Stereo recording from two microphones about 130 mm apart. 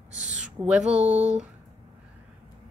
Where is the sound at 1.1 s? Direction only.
60° right (ahead or behind).